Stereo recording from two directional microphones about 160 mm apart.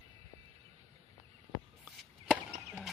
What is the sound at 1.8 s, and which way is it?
Chop, 5° right (ahead or behind).